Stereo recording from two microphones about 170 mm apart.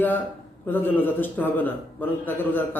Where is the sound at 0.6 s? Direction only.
10° left (ahead or behind).